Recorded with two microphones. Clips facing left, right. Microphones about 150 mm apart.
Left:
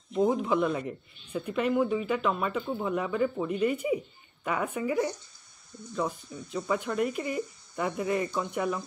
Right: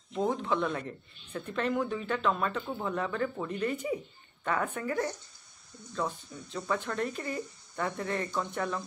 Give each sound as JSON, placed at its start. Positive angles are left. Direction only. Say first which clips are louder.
{"t": 0.1, "sound": "speech", "louder": "left 4 dB", "side_deg": 10}